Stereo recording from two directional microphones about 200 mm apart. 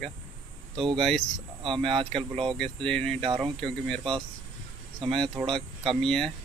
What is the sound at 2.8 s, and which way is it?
Speech, 5° left (ahead or behind).